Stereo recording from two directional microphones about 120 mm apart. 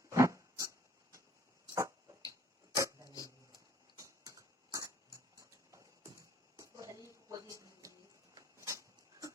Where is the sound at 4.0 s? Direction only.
30° right (ahead or behind).